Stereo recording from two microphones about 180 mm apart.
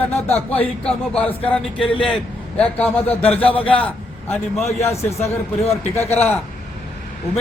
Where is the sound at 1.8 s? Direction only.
30° left (ahead or behind).